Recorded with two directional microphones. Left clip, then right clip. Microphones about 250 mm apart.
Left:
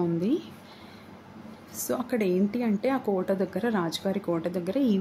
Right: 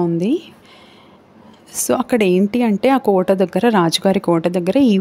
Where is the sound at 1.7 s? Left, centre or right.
Right.